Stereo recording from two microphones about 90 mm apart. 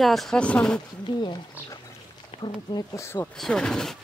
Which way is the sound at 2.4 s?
55° left (ahead or behind).